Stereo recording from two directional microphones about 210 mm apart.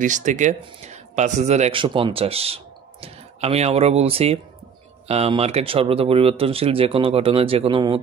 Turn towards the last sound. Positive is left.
turn(degrees=-25)  # may be behind; listen again after turning